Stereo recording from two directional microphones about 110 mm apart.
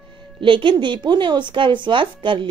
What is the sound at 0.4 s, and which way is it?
A woman's voice, 50° right (ahead or behind).